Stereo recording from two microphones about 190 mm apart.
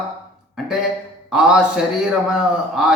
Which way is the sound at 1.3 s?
5° right (ahead or behind).